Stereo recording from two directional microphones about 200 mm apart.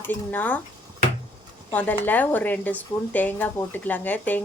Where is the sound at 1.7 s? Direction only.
10° left (ahead or behind).